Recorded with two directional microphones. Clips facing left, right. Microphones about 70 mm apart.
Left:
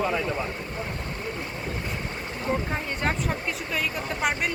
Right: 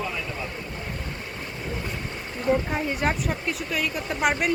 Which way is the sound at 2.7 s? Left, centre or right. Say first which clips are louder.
Right 3 dB; centre.